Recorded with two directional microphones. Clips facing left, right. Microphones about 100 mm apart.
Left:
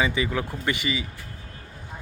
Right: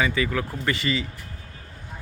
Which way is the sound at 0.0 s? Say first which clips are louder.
Right 1 dB; 20° left (ahead or behind).